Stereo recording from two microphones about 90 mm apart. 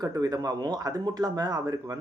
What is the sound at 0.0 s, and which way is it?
Speech, 40° right (ahead or behind).